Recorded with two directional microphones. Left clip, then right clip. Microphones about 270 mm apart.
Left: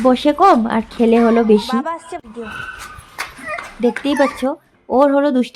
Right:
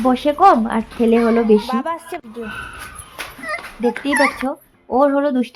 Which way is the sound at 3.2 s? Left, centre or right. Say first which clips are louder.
Left 4 dB; left.